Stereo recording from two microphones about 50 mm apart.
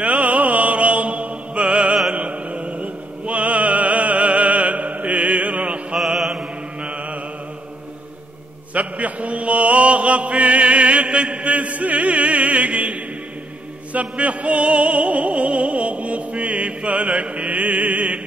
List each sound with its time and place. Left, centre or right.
0.0 s mantra: right
2.1 s music: right
6.1 s mantra: centre
6.8 s mantra: right
8.7 s chant: right
13.9 s music: right